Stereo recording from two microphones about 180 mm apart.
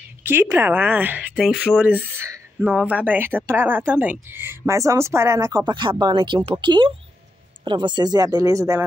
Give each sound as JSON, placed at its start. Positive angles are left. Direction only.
{"t": 0.2, "sound": "speech", "side_deg": -15}
{"t": 1.8, "sound": "speech", "side_deg": -10}